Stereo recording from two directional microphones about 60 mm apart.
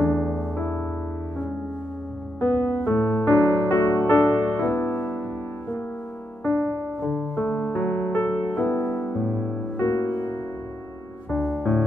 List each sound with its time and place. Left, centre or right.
0.4 s music: left
2.4 s music: left
6.4 s music: left
11.2 s music: left